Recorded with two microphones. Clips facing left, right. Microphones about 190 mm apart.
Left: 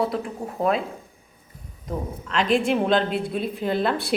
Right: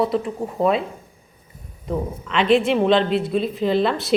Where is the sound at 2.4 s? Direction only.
45° left (ahead or behind).